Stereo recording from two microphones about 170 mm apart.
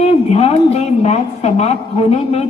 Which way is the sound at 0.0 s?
35° left (ahead or behind).